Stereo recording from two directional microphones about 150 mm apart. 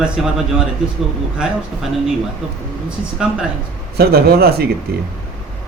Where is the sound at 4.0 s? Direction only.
90° right.